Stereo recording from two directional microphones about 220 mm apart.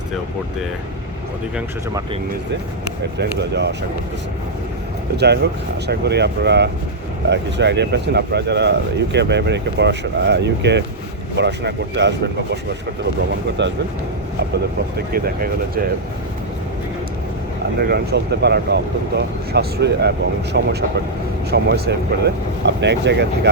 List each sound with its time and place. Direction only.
3.2 s speech: 50° right (ahead or behind)
5.1 s speech: 50° right (ahead or behind)
13.6 s speech: 50° right (ahead or behind)
14.9 s speech: 45° right (ahead or behind)
17.7 s speech: 45° right (ahead or behind)